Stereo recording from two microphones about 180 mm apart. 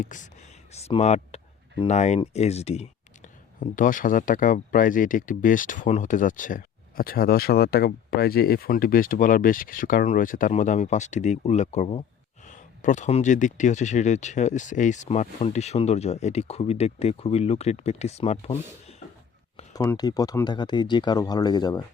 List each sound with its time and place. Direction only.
0.0 s speech: 45° left (ahead or behind)
19.7 s speech: 20° left (ahead or behind)